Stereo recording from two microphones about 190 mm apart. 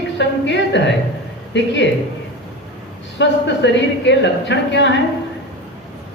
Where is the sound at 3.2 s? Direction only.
70° left (ahead or behind).